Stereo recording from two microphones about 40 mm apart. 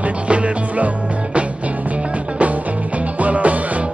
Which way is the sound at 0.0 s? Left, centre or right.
Right.